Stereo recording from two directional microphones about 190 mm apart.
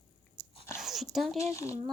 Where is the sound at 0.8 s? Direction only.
Centre (ahead or behind).